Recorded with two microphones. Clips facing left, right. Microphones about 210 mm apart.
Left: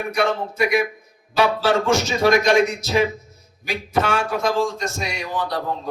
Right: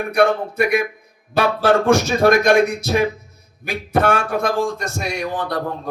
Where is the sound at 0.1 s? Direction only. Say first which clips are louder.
Right 6 dB; 60° right (ahead or behind).